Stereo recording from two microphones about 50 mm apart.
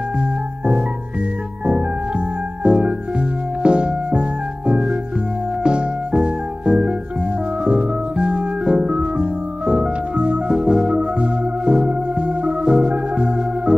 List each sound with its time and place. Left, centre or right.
1.7 s music: centre
10.5 s music: centre